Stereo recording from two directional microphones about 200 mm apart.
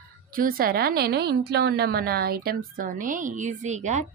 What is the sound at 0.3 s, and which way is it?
A woman's voice, 45° right (ahead or behind).